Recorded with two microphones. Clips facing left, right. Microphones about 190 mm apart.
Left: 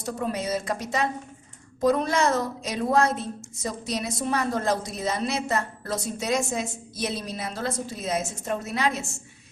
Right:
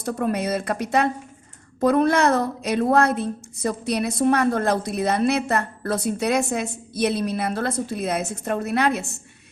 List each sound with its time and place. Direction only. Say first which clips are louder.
0.0 s a woman's voice: right 5 dB; 60° right (ahead or behind)